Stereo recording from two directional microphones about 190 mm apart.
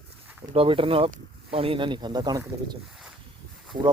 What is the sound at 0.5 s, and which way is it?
Speech, 30° right (ahead or behind).